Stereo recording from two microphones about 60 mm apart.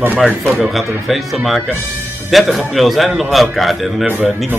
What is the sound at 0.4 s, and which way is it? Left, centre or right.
Speech, centre.